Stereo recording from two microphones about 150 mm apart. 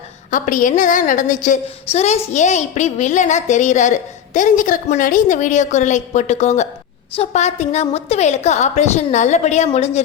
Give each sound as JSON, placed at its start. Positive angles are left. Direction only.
{"t": 0.3, "sound": "a woman's voice", "side_deg": 60}
{"t": 1.9, "sound": "a woman's voice", "side_deg": 45}